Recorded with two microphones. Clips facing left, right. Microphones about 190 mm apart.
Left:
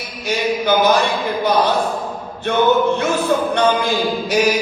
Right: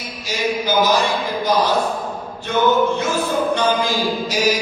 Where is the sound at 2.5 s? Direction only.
60° left (ahead or behind).